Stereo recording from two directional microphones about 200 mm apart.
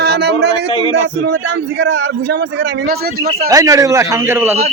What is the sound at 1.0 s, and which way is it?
A man's voice, 60° right (ahead or behind).